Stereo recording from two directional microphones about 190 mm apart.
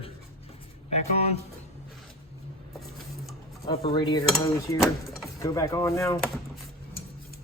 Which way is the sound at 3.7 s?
25° left (ahead or behind).